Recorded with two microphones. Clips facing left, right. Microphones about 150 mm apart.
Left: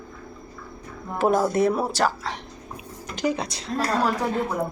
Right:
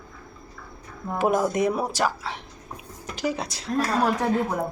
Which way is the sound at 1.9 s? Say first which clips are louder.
Left 2 dB; 10° right (ahead or behind).